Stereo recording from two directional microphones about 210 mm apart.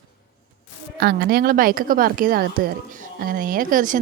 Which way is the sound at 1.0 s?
45° right (ahead or behind).